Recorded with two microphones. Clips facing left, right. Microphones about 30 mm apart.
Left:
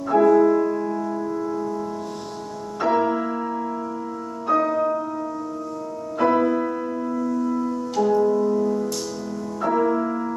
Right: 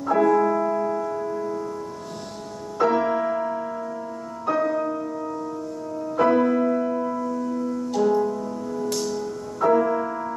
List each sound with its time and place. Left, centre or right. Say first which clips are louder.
0.1 s keyboard: left 3 dB; centre
2.8 s music: even; centre
6.1 s music: even; centre
7.4 s music: left 2 dB; centre
8.3 s music: left 8 dB; centre
9.6 s music: right 1 dB; centre